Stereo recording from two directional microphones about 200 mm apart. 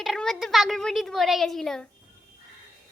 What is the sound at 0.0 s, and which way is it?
Speech, centre (ahead or behind).